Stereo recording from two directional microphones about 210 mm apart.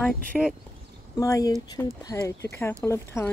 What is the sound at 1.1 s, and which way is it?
Speech, 15° left (ahead or behind).